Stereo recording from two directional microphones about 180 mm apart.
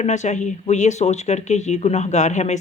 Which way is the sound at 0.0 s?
40° left (ahead or behind).